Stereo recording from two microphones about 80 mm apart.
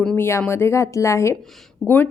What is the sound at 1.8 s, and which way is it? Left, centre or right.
Speech, left.